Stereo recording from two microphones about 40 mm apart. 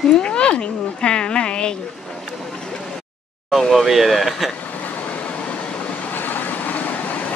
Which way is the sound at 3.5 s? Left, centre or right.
Centre.